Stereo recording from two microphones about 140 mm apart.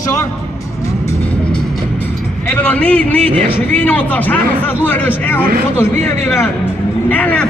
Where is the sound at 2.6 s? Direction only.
10° left (ahead or behind).